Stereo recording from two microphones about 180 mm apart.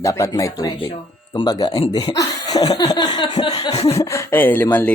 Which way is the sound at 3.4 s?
25° left (ahead or behind).